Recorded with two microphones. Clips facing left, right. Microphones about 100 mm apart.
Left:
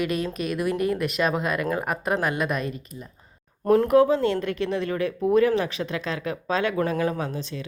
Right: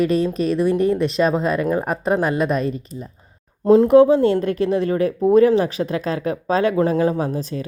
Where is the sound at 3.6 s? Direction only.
20° right (ahead or behind).